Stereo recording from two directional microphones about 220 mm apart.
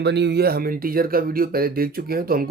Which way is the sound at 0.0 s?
50° right (ahead or behind).